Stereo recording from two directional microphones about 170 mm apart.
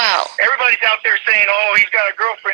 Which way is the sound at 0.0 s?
60° right (ahead or behind).